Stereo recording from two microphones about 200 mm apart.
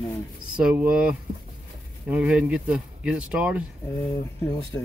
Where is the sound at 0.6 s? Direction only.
5° right (ahead or behind).